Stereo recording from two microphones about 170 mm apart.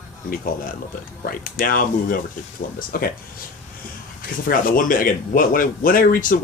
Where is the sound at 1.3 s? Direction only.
55° left (ahead or behind).